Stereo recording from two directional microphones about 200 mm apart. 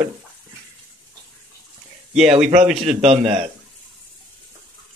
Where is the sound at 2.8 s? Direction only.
30° right (ahead or behind).